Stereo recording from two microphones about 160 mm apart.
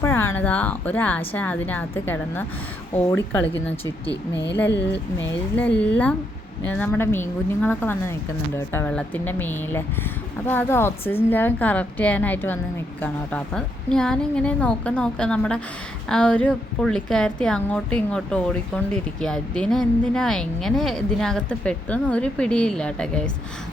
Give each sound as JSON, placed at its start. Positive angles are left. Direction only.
{"t": 0.0, "sound": "a woman's voice", "side_deg": 15}
{"t": 4.1, "sound": "speech", "side_deg": 90}
{"t": 5.1, "sound": "a woman's voice", "side_deg": 10}